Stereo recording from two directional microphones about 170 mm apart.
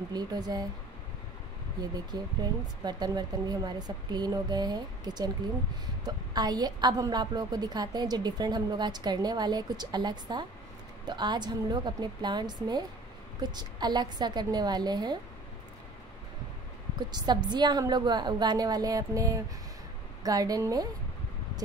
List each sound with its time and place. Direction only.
0.1 s a woman's voice: 25° right (ahead or behind)
2.1 s a woman's voice: 25° right (ahead or behind)
17.1 s a woman's voice: 25° right (ahead or behind)